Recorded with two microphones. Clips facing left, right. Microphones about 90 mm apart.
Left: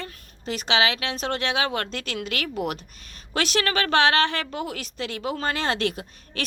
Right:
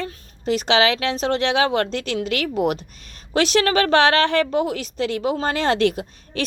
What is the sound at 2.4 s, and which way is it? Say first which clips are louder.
Speech: right 8 dB; 55° right (ahead or behind).